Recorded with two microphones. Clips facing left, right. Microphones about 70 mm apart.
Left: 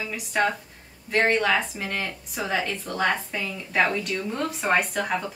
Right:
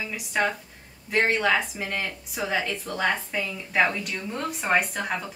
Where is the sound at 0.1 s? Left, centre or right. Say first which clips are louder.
Left 2 dB; centre.